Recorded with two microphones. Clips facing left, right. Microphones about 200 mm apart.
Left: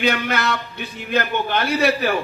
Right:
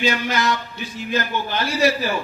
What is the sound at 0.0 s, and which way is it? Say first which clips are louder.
A man's voice: even; 60° left (ahead or behind).